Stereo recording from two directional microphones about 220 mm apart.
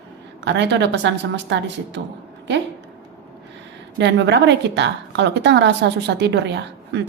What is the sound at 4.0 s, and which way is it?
A woman's voice, 55° right (ahead or behind).